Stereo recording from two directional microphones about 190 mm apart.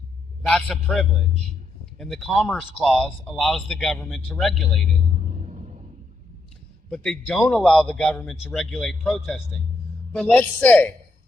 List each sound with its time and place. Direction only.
0.4 s a man's voice: centre (ahead or behind)
5.4 s rumble: 35° right (ahead or behind)
6.9 s speech: 5° left (ahead or behind)